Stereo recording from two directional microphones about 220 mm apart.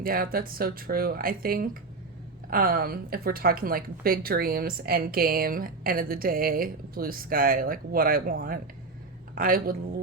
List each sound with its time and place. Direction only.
0.0 s a woman's voice: 40° right (ahead or behind)